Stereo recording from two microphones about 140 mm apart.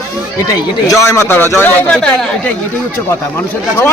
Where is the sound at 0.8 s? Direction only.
20° left (ahead or behind); by 2.1 s 5° left (ahead or behind).